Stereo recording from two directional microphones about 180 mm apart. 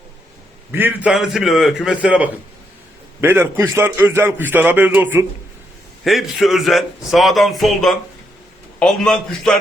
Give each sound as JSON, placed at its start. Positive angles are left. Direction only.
{"t": 0.7, "sound": "a man's voice", "side_deg": -10}